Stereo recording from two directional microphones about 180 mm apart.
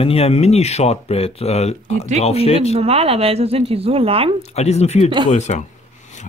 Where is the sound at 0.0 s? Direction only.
35° left (ahead or behind).